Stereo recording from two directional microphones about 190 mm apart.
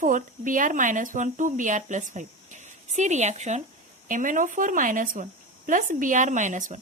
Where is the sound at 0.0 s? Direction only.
45° right (ahead or behind).